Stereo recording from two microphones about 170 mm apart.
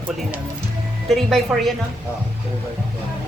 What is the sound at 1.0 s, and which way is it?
Speech, centre (ahead or behind).